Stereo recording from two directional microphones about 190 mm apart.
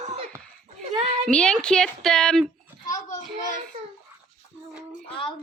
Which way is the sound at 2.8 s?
40° left (ahead or behind).